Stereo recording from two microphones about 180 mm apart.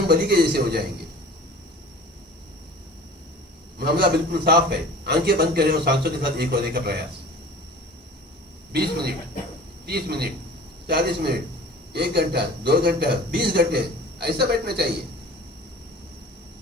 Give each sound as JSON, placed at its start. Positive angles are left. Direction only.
{"t": 0.1, "sound": "a man's voice", "side_deg": -60}
{"t": 3.8, "sound": "a man's voice", "side_deg": -60}
{"t": 8.7, "sound": "a man's voice", "side_deg": -60}